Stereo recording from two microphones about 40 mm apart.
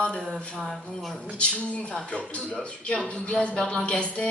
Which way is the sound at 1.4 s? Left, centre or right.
Left.